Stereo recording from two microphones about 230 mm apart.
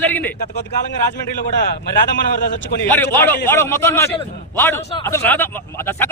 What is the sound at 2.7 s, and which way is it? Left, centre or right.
Speech, left.